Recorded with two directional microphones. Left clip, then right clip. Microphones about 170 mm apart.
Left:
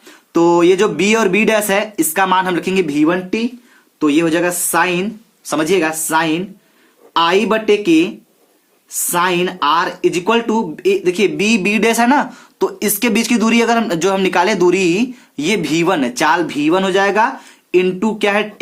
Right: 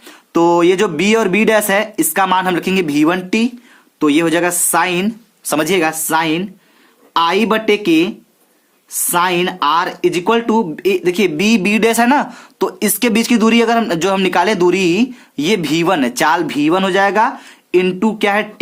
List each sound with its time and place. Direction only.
0.0 s speech: 35° right (ahead or behind); by 3.5 s 60° right (ahead or behind)
4.0 s a woman's voice: 45° right (ahead or behind)